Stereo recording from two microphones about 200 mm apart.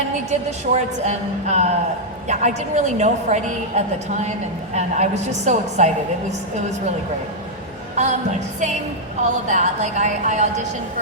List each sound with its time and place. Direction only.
0.3 s a woman's voice: 35° right (ahead or behind)
7.9 s a woman's voice: 35° right (ahead or behind)